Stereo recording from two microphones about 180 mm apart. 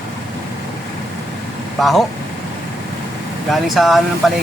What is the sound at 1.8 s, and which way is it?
Speech, centre (ahead or behind).